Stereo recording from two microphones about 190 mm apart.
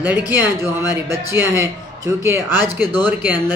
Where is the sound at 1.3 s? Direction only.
15° right (ahead or behind).